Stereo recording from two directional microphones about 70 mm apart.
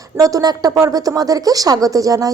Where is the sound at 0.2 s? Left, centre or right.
Right.